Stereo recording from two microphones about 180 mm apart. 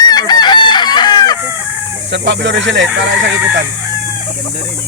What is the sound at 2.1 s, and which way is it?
Speech, 80° right.